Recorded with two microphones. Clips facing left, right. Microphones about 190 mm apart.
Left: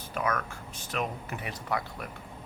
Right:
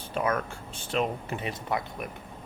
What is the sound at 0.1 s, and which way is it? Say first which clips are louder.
Speech: right 3 dB; 30° right (ahead or behind).